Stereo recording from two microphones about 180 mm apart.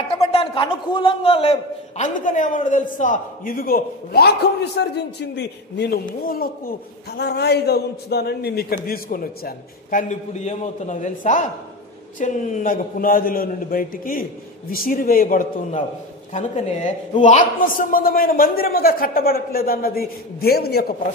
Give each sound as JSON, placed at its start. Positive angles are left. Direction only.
{"t": 0.1, "sound": "a man's voice", "side_deg": 30}
{"t": 6.0, "sound": "a man's voice", "side_deg": 55}
{"t": 7.2, "sound": "a man's voice", "side_deg": 65}
{"t": 16.3, "sound": "a man's voice", "side_deg": 40}